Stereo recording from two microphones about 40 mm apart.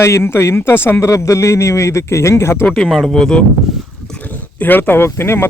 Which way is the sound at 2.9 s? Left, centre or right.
Centre.